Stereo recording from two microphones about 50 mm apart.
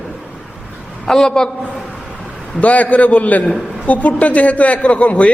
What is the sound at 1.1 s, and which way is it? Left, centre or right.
Speech, centre.